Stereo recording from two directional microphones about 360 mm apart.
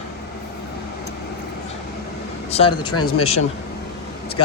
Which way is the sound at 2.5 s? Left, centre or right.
Centre.